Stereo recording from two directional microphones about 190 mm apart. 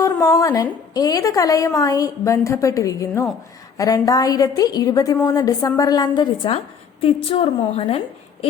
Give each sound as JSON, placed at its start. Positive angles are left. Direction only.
{"t": 0.0, "sound": "a woman's voice", "side_deg": 15}